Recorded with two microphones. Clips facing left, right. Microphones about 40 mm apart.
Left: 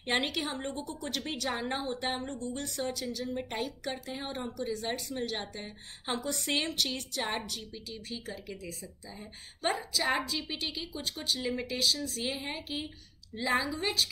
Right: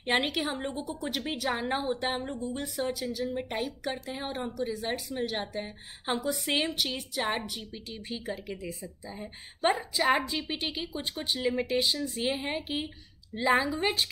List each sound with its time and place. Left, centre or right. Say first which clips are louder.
0.0 s a woman's voice: right 3 dB; centre; by 14.0 s right